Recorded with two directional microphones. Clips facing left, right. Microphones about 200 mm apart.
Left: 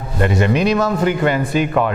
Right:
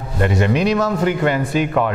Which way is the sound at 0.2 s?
15° left (ahead or behind).